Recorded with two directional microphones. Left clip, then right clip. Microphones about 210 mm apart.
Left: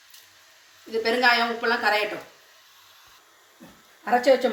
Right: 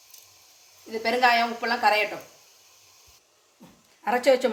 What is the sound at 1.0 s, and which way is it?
Speech, 15° right (ahead or behind).